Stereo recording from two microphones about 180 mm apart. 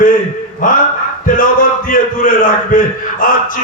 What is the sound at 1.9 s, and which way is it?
Speech, 50° left (ahead or behind).